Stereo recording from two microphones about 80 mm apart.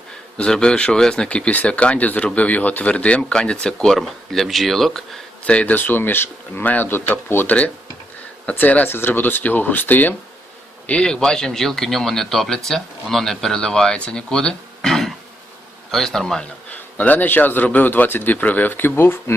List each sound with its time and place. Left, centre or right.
0.3 s speech: centre
5.5 s speech: centre
16.7 s speech: left